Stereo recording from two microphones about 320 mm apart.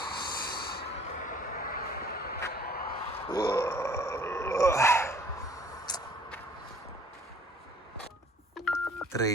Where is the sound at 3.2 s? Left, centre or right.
Centre.